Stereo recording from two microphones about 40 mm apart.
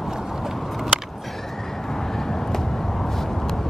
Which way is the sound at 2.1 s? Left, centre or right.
Centre.